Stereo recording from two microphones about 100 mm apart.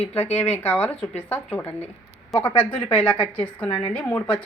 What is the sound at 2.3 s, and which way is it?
Speech, centre (ahead or behind).